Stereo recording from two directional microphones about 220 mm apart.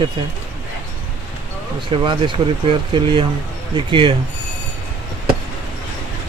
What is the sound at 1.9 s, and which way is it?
Speech, 25° right (ahead or behind).